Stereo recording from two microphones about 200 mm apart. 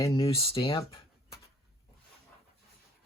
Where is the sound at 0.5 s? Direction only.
25° left (ahead or behind).